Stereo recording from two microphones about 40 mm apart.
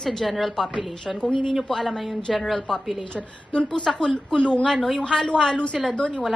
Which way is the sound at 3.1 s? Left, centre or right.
Left.